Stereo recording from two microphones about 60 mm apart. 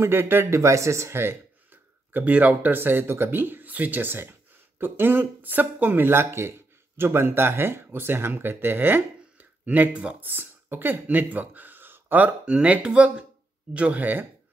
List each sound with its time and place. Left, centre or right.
0.0 s speech: right
0.6 s speech: right